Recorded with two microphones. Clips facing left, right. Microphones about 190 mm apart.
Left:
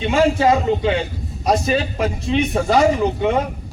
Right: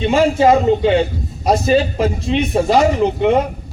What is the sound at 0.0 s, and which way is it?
Speech, 25° right (ahead or behind).